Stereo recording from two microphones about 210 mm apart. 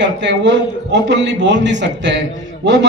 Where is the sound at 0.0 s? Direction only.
55° right (ahead or behind).